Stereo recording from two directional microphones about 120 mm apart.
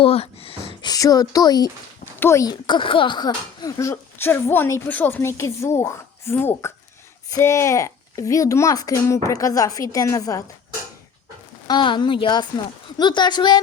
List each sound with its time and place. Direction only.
0.0 s speech: 55° left (ahead or behind)
0.8 s speech: 30° left (ahead or behind)
2.1 s speech: 20° left (ahead or behind)
2.5 s speech: 40° left (ahead or behind)
11.7 s speech: 40° left (ahead or behind)